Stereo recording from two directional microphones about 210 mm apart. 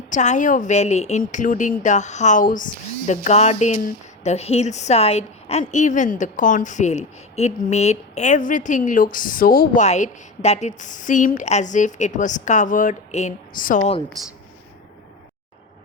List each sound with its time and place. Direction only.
0.1 s speech: 35° left (ahead or behind)